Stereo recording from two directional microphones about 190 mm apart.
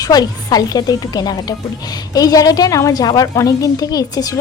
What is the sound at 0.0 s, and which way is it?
A woman's voice, 20° left (ahead or behind).